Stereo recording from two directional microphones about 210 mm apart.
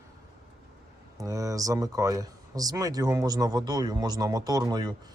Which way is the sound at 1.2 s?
15° right (ahead or behind).